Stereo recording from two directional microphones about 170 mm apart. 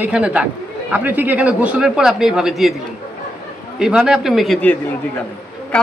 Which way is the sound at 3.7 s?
5° right (ahead or behind).